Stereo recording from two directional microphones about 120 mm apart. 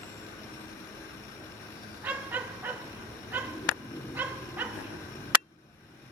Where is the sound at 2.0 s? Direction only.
15° right (ahead or behind).